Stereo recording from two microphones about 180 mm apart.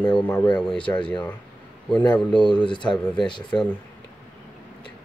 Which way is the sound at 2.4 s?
25° left (ahead or behind).